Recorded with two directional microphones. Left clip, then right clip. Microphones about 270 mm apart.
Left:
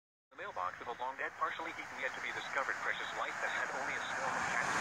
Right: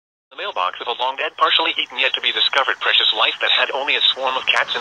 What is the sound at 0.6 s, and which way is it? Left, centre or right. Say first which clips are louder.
Speech: right 19 dB; right.